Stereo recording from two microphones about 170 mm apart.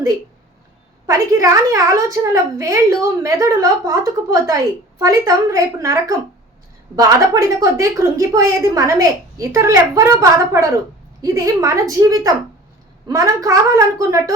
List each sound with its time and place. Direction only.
1.0 s a woman's voice: 20° right (ahead or behind)